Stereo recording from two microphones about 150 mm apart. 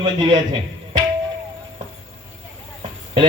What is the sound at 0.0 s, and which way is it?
Speech, 30° right (ahead or behind).